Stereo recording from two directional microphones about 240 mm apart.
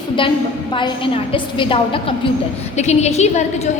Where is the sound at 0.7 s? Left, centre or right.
Centre.